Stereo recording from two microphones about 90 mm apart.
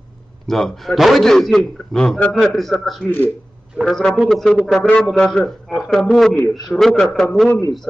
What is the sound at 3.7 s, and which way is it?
Speech, centre (ahead or behind).